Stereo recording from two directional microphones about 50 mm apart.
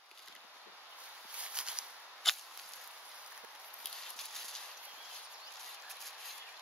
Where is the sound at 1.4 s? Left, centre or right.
Right.